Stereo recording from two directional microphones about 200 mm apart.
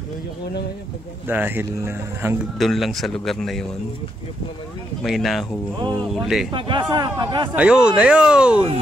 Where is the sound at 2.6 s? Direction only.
Centre (ahead or behind).